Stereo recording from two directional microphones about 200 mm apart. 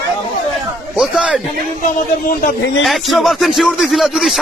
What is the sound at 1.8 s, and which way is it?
Speech, 45° left (ahead or behind).